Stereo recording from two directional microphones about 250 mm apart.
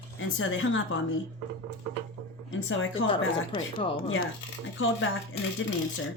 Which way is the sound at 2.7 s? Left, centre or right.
Left.